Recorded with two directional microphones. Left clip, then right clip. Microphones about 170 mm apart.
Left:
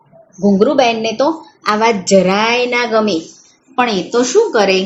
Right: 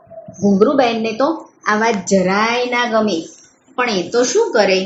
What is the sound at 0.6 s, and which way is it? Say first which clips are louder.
A woman's voice: left 2 dB; 40° left (ahead or behind).